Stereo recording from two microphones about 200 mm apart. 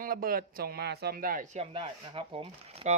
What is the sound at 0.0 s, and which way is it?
Speech, 45° right (ahead or behind).